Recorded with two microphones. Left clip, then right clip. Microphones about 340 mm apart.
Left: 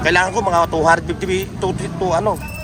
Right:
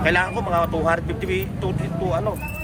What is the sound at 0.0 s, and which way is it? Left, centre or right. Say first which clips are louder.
Speech: left 5 dB; centre.